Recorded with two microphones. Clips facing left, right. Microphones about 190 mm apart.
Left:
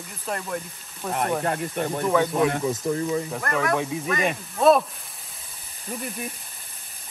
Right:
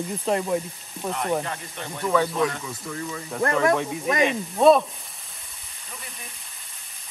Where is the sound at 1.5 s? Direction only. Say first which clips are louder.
Left 8 dB; 50° left (ahead or behind).